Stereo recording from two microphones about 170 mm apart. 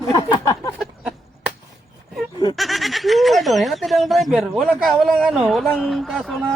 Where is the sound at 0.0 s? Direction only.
20° left (ahead or behind).